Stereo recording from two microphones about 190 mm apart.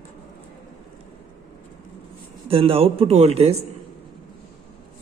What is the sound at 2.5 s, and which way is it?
A man's voice, 30° right (ahead or behind).